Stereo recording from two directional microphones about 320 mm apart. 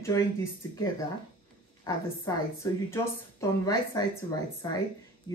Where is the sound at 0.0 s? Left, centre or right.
Centre.